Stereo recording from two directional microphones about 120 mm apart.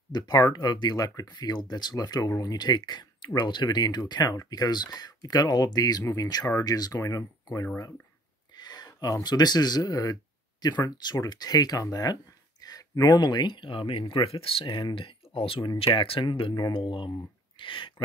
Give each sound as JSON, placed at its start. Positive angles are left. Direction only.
{"t": 0.1, "sound": "speech", "side_deg": 35}
{"t": 8.5, "sound": "speech", "side_deg": 35}